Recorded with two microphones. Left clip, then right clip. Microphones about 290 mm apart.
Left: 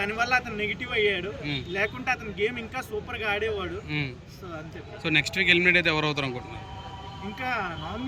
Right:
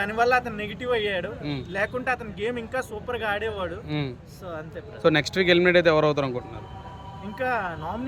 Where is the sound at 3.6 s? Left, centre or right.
Centre.